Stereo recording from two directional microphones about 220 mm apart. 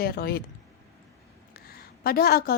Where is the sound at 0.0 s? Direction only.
45° left (ahead or behind).